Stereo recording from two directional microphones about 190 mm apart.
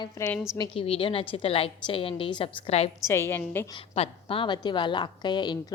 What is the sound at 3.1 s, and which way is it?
Speech, 15° left (ahead or behind).